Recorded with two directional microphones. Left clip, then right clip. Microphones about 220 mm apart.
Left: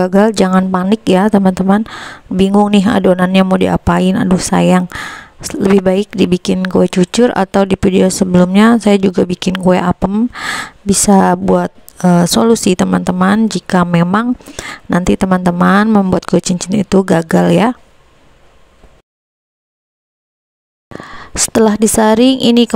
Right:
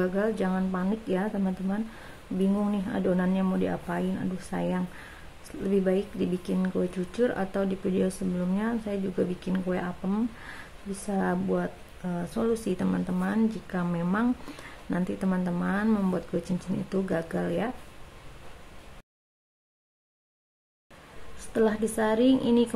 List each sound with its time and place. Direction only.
0.0 s speech: 50° left (ahead or behind)
2.9 s speech: 55° left (ahead or behind)
21.5 s speech: 45° left (ahead or behind)